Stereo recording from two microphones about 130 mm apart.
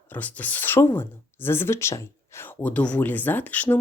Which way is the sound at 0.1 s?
15° left (ahead or behind).